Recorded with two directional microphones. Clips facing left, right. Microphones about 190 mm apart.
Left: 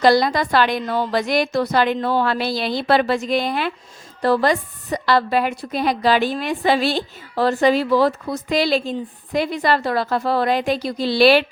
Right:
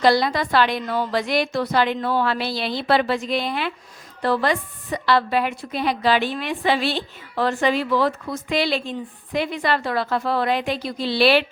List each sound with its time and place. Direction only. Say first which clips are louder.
0.0 s a woman's voice: left 3 dB; 45° left (ahead or behind)